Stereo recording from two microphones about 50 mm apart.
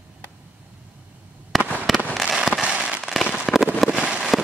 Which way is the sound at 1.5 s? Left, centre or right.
Centre.